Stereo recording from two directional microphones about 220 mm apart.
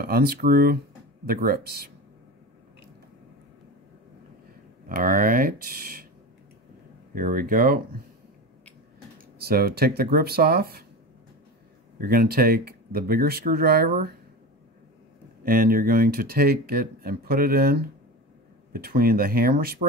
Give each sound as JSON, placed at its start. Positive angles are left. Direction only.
{"t": 0.0, "sound": "speech", "side_deg": -45}
{"t": 4.8, "sound": "speech", "side_deg": -40}
{"t": 7.2, "sound": "speech", "side_deg": -40}
{"t": 9.4, "sound": "speech", "side_deg": -45}
{"t": 12.0, "sound": "speech", "side_deg": -45}
{"t": 15.4, "sound": "speech", "side_deg": -40}